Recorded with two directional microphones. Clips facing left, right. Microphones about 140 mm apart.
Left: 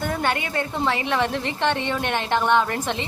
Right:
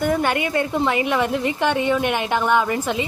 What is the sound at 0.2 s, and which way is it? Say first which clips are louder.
A woman's voice: right 4 dB; 15° right (ahead or behind).